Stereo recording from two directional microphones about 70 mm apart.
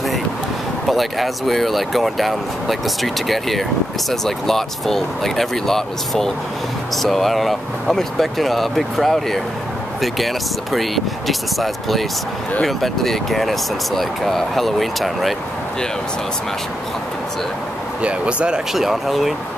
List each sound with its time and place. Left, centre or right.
0.8 s speech: centre
18.0 s speech: centre
18.7 s speech: centre